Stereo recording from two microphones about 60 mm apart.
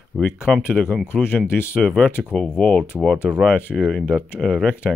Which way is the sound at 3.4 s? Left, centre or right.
Left.